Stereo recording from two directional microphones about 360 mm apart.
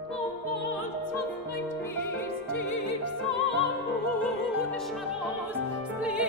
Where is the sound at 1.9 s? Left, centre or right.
Left.